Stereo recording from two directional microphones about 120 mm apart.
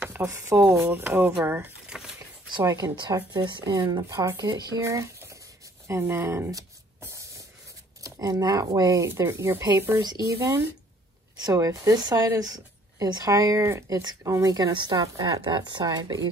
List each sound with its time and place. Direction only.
0.1 s a woman's voice: 20° right (ahead or behind)
1.9 s a sound: 5° right (ahead or behind)
2.6 s a woman's voice: 25° right (ahead or behind)
3.3 s a woman's voice: 40° right (ahead or behind)
5.9 s a sound: 20° right (ahead or behind)
8.0 s a woman's voice: 30° right (ahead or behind)